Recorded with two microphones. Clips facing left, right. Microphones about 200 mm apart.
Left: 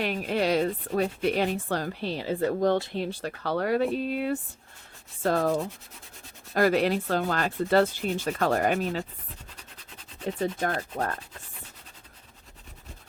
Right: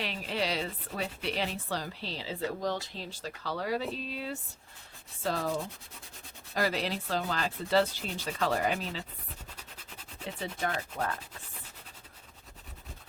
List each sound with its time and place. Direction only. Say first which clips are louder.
0.0 s speech: left 7 dB; 50° left (ahead or behind)
6.5 s sanding: left 8 dB; 55° left (ahead or behind)
10.4 s speech: left 5 dB; 45° left (ahead or behind)